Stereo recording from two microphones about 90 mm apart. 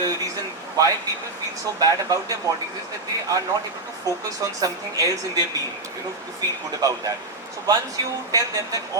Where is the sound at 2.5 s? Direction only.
40° right (ahead or behind).